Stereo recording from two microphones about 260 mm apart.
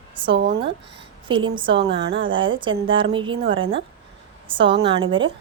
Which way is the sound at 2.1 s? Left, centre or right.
Right.